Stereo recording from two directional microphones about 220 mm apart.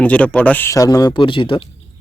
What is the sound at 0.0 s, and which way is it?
Speech, 5° left (ahead or behind).